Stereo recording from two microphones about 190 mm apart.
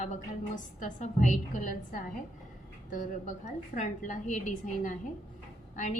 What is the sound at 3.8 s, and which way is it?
A woman's voice, 40° left (ahead or behind).